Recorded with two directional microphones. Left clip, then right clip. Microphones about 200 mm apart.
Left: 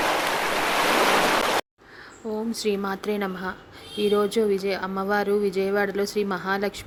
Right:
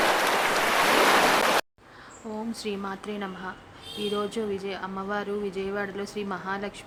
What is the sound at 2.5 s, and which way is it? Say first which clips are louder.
Speech: left 7 dB; 25° left (ahead or behind).